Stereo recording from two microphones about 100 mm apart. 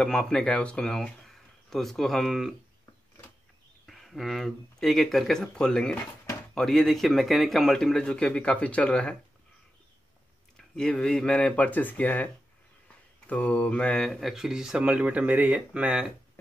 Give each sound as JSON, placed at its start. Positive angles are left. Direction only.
{"t": 0.0, "sound": "speech", "side_deg": 5}
{"t": 3.8, "sound": "speech", "side_deg": 0}
{"t": 10.8, "sound": "speech", "side_deg": 5}
{"t": 13.3, "sound": "speech", "side_deg": 15}
{"t": 14.3, "sound": "speech", "side_deg": -5}